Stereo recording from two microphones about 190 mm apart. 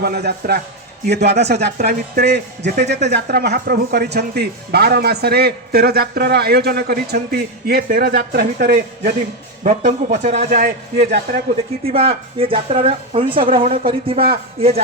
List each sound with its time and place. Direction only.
0.0 s speech: 55° right (ahead or behind)
10.2 s a man's voice: 40° right (ahead or behind)
11.9 s a woman's voice: 30° right (ahead or behind)